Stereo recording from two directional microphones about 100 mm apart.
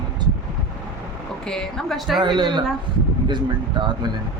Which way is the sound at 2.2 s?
50° right (ahead or behind).